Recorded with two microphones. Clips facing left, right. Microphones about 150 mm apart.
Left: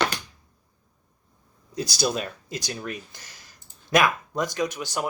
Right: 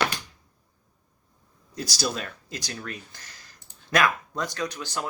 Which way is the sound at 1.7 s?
20° left (ahead or behind).